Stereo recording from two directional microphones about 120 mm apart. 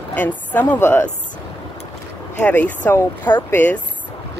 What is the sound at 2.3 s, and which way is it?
Speech, 15° left (ahead or behind).